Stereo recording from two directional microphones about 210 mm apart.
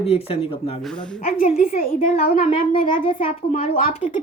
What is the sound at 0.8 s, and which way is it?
Speech, 5° left (ahead or behind).